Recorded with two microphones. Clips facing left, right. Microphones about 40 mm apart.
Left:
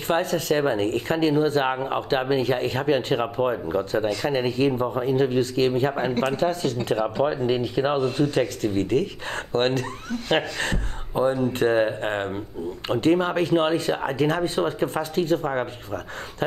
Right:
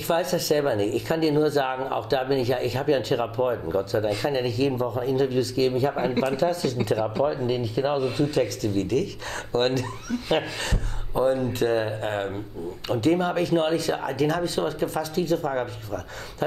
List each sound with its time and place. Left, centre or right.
0.1 s speech: left